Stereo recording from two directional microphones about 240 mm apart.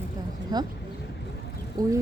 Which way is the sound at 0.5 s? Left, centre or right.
Centre.